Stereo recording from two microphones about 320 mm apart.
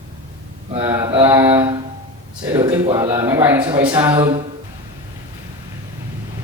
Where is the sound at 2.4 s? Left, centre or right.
Centre.